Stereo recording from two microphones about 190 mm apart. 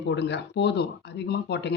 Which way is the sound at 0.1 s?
65° left (ahead or behind).